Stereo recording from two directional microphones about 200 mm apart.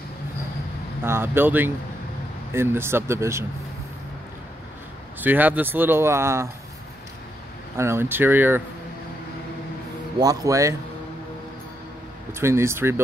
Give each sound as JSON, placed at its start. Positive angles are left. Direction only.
{"t": 1.0, "sound": "speech", "side_deg": -10}
{"t": 5.2, "sound": "speech", "side_deg": -10}
{"t": 7.7, "sound": "speech", "side_deg": -15}
{"t": 10.1, "sound": "speech", "side_deg": -15}
{"t": 12.3, "sound": "speech", "side_deg": -10}